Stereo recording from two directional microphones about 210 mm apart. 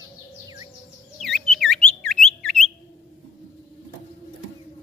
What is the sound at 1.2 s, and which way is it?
Chirp, centre (ahead or behind).